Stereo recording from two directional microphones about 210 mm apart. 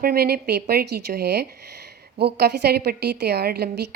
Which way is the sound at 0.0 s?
45° right (ahead or behind).